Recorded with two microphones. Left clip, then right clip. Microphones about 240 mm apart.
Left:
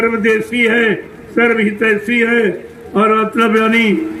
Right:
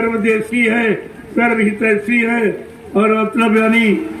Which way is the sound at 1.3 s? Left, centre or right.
Left.